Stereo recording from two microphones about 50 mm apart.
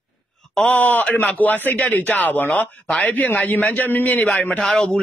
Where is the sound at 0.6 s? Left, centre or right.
Left.